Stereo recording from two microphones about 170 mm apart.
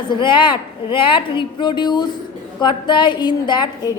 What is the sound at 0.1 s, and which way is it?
A woman's voice, 30° left (ahead or behind).